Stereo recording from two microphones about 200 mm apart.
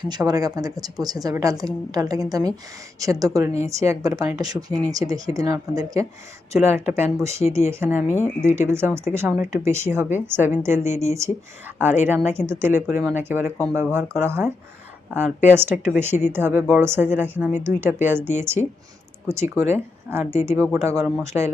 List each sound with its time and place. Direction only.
0.0 s speech: 20° right (ahead or behind)
8.0 s speech: 10° left (ahead or behind)
8.4 s speech: 10° right (ahead or behind)